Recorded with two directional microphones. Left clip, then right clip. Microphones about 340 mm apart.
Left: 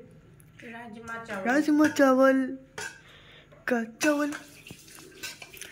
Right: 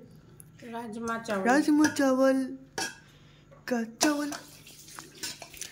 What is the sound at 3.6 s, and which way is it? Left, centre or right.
Speech, centre.